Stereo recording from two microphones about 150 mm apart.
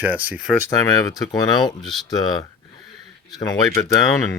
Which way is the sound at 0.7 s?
25° left (ahead or behind).